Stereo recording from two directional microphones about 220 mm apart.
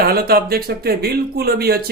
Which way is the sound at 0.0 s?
45° right (ahead or behind).